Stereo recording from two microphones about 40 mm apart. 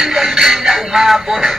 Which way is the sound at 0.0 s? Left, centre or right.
Centre.